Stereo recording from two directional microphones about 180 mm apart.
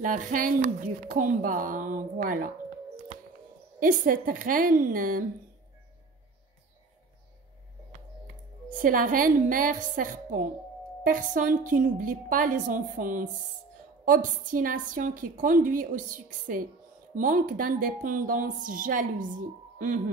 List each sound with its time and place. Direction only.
0.0 s a woman's voice: 45° right (ahead or behind)
3.8 s a woman's voice: 50° right (ahead or behind)
8.6 s a woman's voice: 50° right (ahead or behind)